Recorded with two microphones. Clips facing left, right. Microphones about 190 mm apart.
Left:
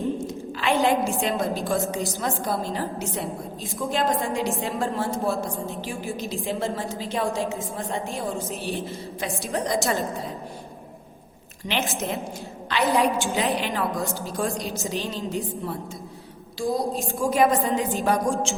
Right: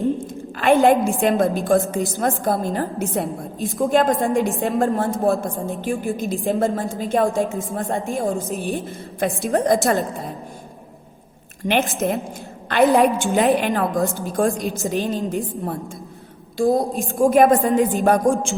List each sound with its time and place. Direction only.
0.6 s a woman's voice: 55° right (ahead or behind)
11.6 s a woman's voice: 55° right (ahead or behind)
16.6 s a woman's voice: 55° right (ahead or behind)